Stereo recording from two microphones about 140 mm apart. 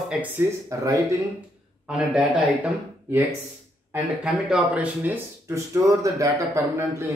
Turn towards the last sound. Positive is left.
turn(degrees=-20)  # may be behind; listen again after turning